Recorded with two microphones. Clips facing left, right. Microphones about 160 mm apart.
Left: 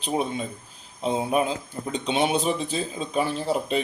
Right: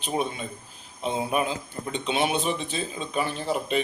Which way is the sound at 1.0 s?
35° left (ahead or behind).